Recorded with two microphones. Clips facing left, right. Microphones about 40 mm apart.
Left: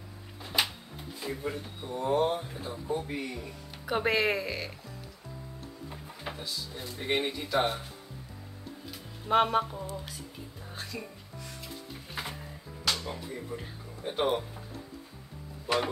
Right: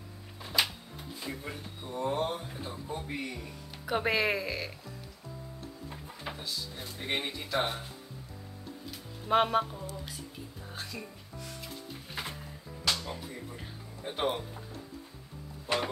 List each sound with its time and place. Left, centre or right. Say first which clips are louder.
0.5 s music: even; left
1.2 s speech: left 6 dB; centre
2.6 s speech: left 5 dB; centre
5.9 s speech: left 1 dB; centre
9.3 s speech: left 1 dB; centre
12.9 s speech: left 2 dB; centre
15.6 s music: left 2 dB; centre